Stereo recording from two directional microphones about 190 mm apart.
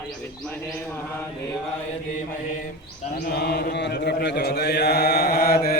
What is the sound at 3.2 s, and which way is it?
Mantra, 55° left (ahead or behind).